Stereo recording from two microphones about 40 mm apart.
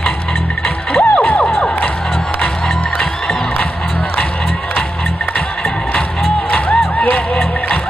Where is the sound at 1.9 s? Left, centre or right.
Centre.